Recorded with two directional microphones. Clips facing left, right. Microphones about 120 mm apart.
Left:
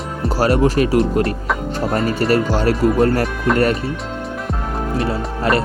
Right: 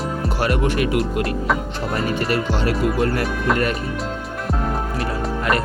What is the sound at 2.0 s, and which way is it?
Speech, 40° left (ahead or behind).